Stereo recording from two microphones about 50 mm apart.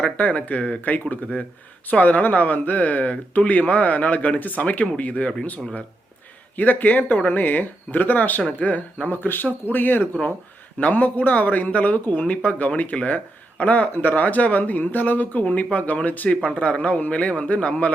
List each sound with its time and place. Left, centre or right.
0.2 s speech: left
6.6 s speech: left
10.8 s speech: left
13.9 s speech: left